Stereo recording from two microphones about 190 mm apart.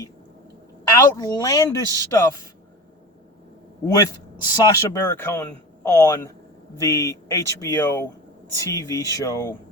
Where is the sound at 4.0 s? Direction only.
20° left (ahead or behind).